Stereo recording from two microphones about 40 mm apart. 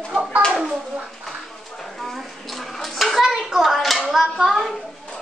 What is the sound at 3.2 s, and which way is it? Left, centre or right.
Hands, centre.